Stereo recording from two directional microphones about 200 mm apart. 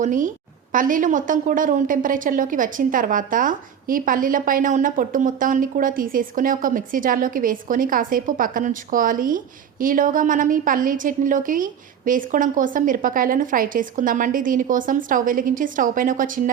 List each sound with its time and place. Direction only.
0.0 s a woman's voice: 40° right (ahead or behind)